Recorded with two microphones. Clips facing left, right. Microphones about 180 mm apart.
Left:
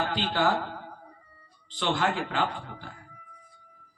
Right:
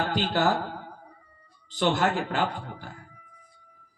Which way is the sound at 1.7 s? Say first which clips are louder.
Right 3 dB; 45° right (ahead or behind).